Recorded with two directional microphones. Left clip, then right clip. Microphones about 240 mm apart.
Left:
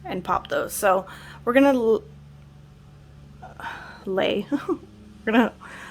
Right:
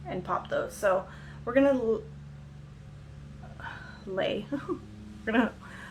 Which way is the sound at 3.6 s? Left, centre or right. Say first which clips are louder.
Left 7 dB; left.